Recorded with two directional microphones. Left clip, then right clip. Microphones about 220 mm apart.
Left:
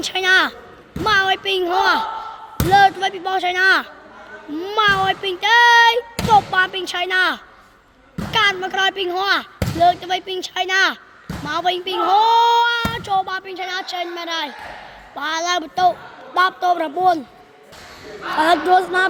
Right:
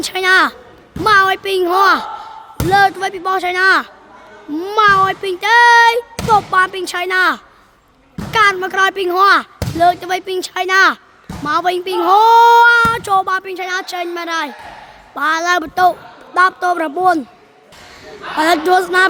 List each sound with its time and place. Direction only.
0.0 s speech: 25° right (ahead or behind)
18.3 s speech: 25° right (ahead or behind)